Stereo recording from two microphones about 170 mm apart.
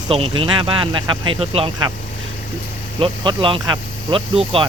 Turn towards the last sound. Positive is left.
turn(degrees=-30)  # may be behind; listen again after turning